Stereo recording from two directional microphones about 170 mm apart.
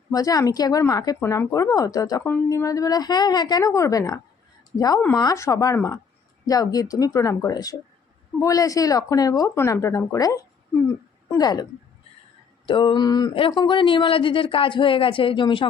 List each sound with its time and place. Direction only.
0.1 s speech: 20° left (ahead or behind)
12.6 s speech: 30° left (ahead or behind)